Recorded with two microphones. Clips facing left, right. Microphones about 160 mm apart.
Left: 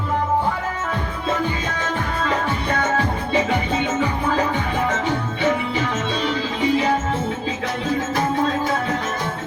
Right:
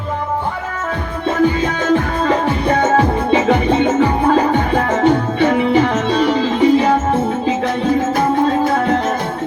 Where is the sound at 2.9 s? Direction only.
55° right (ahead or behind).